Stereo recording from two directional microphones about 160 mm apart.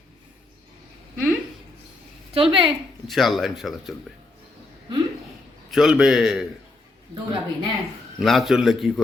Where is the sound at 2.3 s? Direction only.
35° right (ahead or behind).